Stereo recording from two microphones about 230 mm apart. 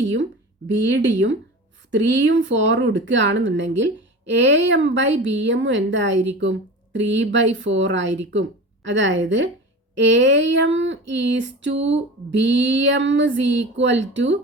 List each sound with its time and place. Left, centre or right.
0.0 s speech: right